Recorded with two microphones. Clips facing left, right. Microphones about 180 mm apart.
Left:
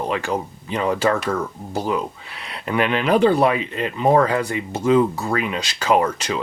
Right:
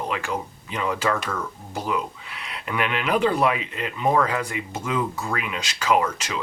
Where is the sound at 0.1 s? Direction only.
35° left (ahead or behind).